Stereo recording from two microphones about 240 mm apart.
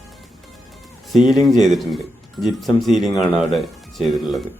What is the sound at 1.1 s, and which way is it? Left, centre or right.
Speech, centre.